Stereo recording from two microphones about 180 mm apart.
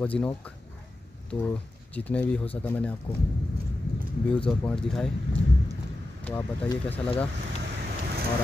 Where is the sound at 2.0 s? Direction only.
10° left (ahead or behind).